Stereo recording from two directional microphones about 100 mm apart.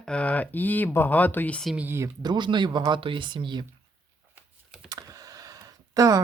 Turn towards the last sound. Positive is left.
turn(degrees=-35)  # may be behind; listen again after turning